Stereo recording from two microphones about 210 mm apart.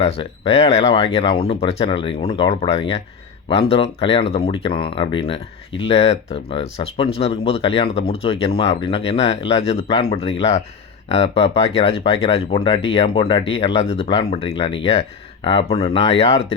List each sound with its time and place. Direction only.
0.0 s speech: 30° left (ahead or behind)